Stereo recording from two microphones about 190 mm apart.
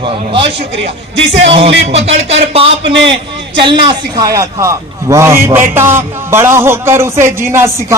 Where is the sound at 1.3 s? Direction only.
30° right (ahead or behind).